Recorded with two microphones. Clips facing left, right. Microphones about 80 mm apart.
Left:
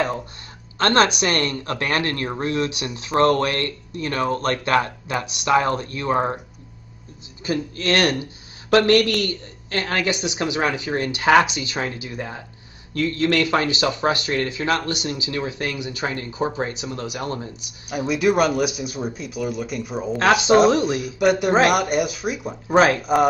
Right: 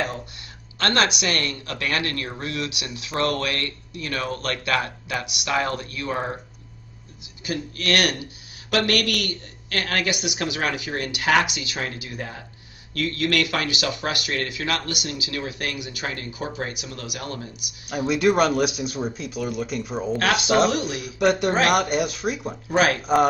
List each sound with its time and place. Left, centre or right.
0.7 s speech: left
7.4 s speech: left
17.8 s speech: centre
20.2 s speech: left
21.0 s speech: centre